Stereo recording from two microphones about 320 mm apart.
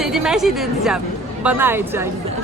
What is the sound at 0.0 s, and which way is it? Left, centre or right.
A woman's voice, centre.